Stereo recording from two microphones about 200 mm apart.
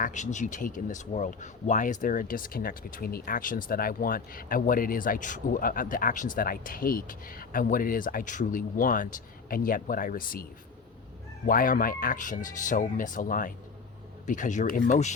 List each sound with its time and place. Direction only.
0.0 s speech: 35° left (ahead or behind)
11.4 s speech: 45° left (ahead or behind)